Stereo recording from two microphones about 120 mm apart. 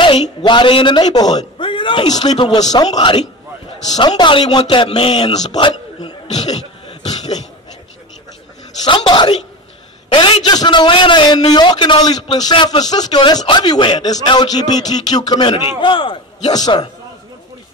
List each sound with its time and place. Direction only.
0.0 s a man's voice: 45° left (ahead or behind)
4.2 s speech: 45° left (ahead or behind)
5.3 s a man's voice: 35° left (ahead or behind)
6.2 s a sound: 65° left (ahead or behind)
8.8 s a man's voice: 40° left (ahead or behind)
16.4 s a man's voice: 30° left (ahead or behind)